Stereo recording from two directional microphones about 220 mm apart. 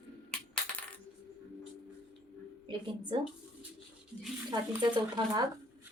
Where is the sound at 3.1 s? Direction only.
25° right (ahead or behind).